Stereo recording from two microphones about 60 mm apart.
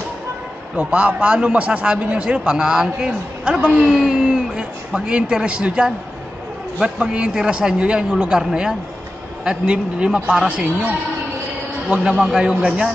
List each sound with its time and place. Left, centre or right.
0.7 s a man's voice: right
11.9 s a man's voice: centre